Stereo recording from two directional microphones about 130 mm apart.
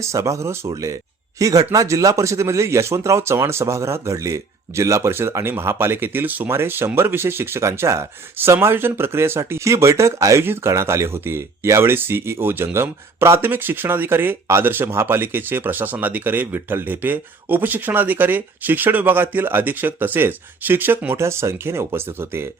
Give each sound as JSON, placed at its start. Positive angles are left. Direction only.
{"t": 0.0, "sound": "speech", "side_deg": -25}